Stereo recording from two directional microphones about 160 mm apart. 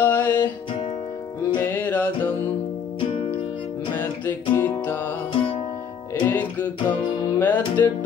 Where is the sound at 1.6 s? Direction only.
10° left (ahead or behind).